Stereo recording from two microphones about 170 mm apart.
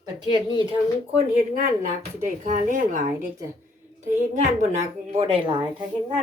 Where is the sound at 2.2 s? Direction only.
45° right (ahead or behind); by 5.6 s 30° right (ahead or behind).